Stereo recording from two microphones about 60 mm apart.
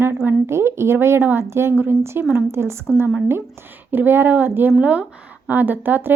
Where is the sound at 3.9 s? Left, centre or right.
Right.